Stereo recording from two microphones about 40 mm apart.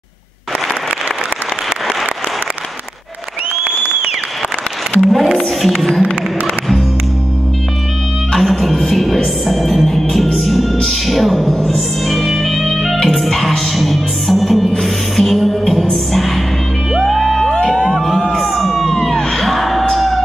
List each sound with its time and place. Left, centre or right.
5.0 s music: centre
5.6 s speech: centre
8.4 s music: centre
17.5 s music: centre
17.9 s crowd: centre
18.4 s music: centre